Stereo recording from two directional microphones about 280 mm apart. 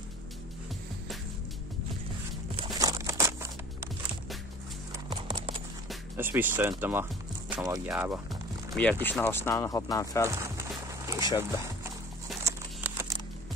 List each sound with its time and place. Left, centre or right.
2.5 s crumpling: centre
4.9 s clip-clop: centre
5.9 s speech: centre
10.4 s music: centre
11.3 s a sound: centre